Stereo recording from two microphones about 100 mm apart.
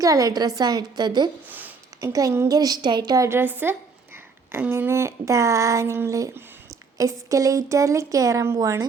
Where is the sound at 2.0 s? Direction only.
35° right (ahead or behind).